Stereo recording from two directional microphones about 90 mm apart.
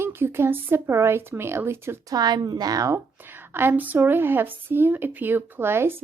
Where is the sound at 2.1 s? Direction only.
50° right (ahead or behind).